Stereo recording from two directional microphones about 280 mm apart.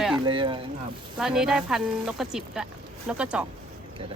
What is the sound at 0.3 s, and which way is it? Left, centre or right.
Speech, centre.